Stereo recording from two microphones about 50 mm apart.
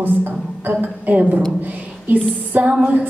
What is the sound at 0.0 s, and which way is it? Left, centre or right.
A woman's voice, right.